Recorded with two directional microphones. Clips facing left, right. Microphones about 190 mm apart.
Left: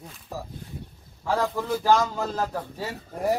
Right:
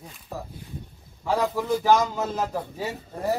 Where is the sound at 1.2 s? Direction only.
15° right (ahead or behind).